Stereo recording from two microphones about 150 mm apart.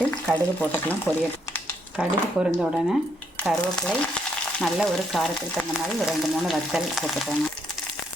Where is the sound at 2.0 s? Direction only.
5° right (ahead or behind).